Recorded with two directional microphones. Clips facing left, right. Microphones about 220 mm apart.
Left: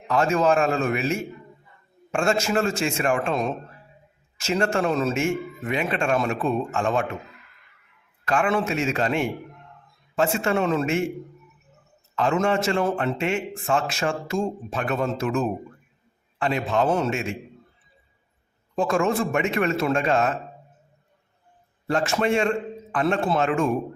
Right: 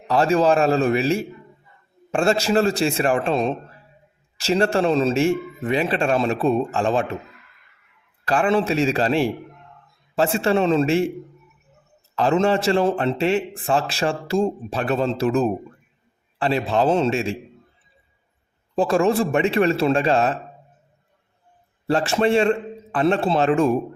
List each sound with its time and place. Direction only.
0.1 s a man's voice: 35° right (ahead or behind)
8.2 s a man's voice: 35° right (ahead or behind)
12.1 s a man's voice: 35° right (ahead or behind)
18.8 s a man's voice: 35° right (ahead or behind)
21.8 s a man's voice: 35° right (ahead or behind)